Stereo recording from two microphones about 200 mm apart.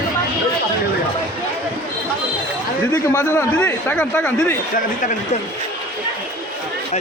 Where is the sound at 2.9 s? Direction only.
15° left (ahead or behind).